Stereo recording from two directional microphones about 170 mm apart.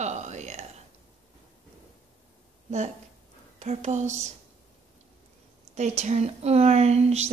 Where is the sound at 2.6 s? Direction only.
40° right (ahead or behind).